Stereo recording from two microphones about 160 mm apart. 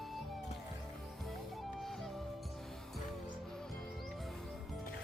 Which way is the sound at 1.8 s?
Centre (ahead or behind).